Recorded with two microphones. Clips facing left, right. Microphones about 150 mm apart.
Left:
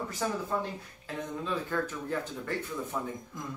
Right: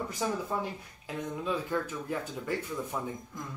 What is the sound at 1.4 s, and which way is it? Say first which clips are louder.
Speech: right 1 dB; 10° right (ahead or behind).